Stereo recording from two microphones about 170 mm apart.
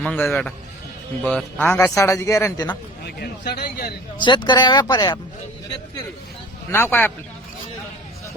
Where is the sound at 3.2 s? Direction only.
70° left (ahead or behind).